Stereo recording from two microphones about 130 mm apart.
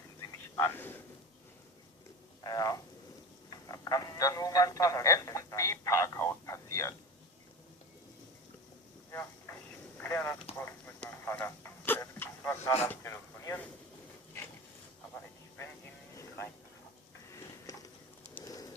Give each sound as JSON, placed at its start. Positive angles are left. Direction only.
{"t": 0.5, "sound": "speech", "side_deg": 20}
{"t": 2.4, "sound": "speech", "side_deg": 30}
{"t": 10.0, "sound": "speech", "side_deg": 20}
{"t": 11.3, "sound": "a sound", "side_deg": 15}